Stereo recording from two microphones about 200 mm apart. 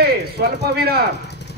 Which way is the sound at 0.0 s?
50° right (ahead or behind).